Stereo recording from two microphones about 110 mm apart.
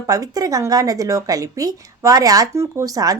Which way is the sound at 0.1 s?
35° right (ahead or behind).